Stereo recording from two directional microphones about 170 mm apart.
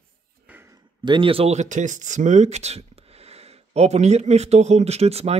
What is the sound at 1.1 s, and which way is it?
Speech, 30° right (ahead or behind).